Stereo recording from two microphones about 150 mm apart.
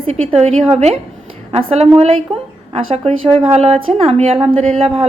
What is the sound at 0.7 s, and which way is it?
A woman's voice, 45° right (ahead or behind).